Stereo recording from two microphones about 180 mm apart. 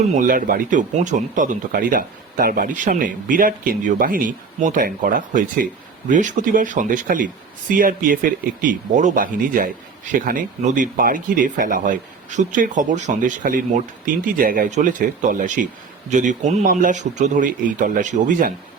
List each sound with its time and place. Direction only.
0.1 s speech: 50° right (ahead or behind)